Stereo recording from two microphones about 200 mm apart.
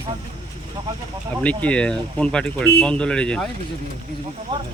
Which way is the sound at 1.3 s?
5° left (ahead or behind).